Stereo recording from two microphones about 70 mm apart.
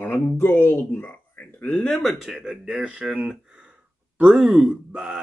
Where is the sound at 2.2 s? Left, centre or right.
Centre.